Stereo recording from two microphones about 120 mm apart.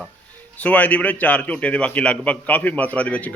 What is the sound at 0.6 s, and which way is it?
A man's voice, 10° left (ahead or behind).